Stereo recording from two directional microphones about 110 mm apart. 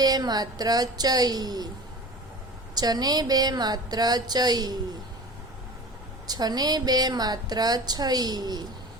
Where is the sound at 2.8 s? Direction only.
35° right (ahead or behind).